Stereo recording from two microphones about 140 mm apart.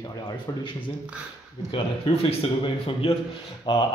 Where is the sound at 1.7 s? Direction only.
35° left (ahead or behind).